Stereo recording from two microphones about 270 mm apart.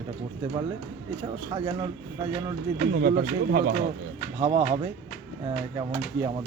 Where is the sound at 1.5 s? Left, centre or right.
Centre.